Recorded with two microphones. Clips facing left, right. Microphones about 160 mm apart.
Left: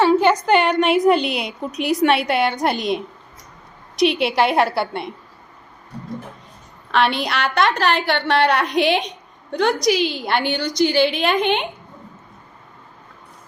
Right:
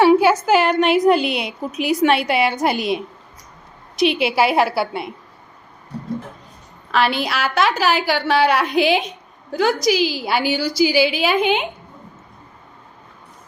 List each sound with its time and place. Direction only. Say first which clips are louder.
0.0 s a woman's voice: right 2 dB; 10° right (ahead or behind)
6.9 s a woman's voice: even; centre (ahead or behind)